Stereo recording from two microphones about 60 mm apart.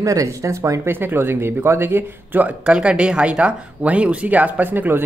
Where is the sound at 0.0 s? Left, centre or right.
Right.